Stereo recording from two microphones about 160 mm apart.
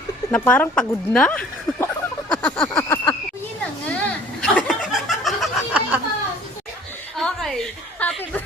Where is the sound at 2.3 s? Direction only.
10° left (ahead or behind).